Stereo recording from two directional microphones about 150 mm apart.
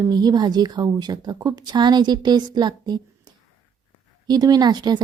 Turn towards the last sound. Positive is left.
turn(degrees=-30)  # may be behind; listen again after turning